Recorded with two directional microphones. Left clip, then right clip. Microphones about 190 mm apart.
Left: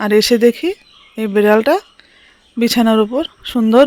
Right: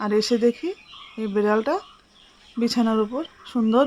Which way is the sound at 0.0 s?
30° left (ahead or behind).